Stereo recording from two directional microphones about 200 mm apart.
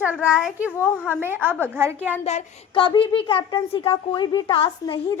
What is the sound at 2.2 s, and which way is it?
A woman's voice, 30° left (ahead or behind).